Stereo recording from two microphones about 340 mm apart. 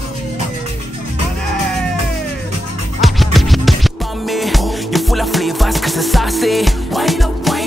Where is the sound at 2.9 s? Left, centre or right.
Centre.